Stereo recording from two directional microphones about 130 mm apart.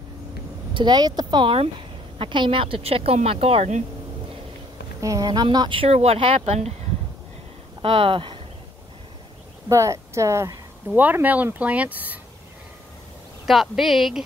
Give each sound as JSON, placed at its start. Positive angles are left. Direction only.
{"t": 0.7, "sound": "a woman's voice", "side_deg": -35}
{"t": 5.0, "sound": "speech", "side_deg": -30}
{"t": 7.8, "sound": "speech", "side_deg": -45}
{"t": 9.7, "sound": "speech", "side_deg": -25}
{"t": 10.9, "sound": "speech", "side_deg": -15}
{"t": 13.5, "sound": "a woman's voice", "side_deg": 0}